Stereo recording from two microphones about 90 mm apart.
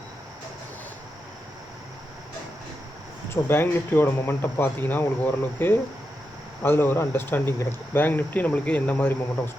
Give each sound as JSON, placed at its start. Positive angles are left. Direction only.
{"t": 3.2, "sound": "speech", "side_deg": 25}